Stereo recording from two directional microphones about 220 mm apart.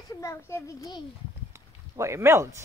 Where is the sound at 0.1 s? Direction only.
15° left (ahead or behind).